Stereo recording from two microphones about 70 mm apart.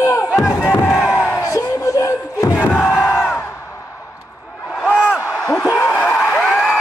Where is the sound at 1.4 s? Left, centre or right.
Left.